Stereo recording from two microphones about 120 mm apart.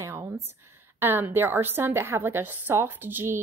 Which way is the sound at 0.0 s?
25° right (ahead or behind).